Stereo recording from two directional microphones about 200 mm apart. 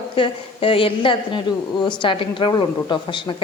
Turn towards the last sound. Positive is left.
turn(degrees=25)  # may be behind; listen again after turning